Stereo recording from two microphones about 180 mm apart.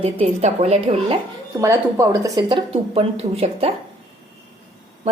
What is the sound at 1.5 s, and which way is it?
Speech, 15° right (ahead or behind).